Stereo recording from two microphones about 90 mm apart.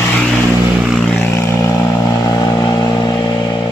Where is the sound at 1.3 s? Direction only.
30° left (ahead or behind).